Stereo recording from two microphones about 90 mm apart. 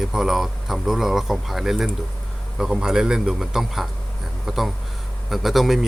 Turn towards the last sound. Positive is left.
turn(degrees=0)  # may be behind; listen again after turning